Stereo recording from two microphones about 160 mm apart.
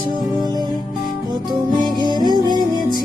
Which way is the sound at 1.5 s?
25° right (ahead or behind).